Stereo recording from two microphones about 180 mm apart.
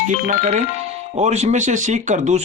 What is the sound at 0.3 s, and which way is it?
Speech, 40° right (ahead or behind).